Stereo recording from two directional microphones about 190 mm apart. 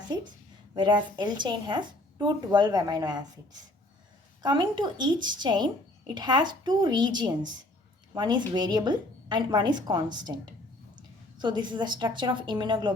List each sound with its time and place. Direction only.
0.8 s a woman's voice: 25° right (ahead or behind)
4.4 s a woman's voice: 25° right (ahead or behind)